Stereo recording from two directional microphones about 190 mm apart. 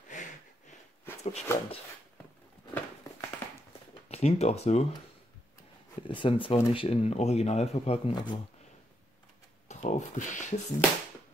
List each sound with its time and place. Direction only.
0.1 s a sound: 40° left (ahead or behind)
1.2 s speech: 35° left (ahead or behind)
2.7 s a sound: 15° left (ahead or behind)
4.1 s speech: 35° left (ahead or behind)
6.0 s speech: 25° left (ahead or behind)
9.7 s speech: 40° left (ahead or behind)